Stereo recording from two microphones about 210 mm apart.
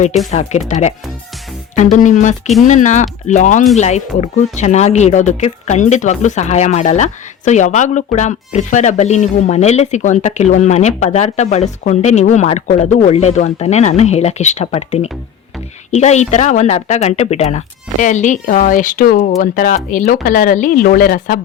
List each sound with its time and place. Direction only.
0.3 s speech: 35° left (ahead or behind)